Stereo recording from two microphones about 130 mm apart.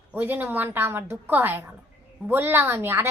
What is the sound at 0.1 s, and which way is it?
A woman's voice, 15° right (ahead or behind).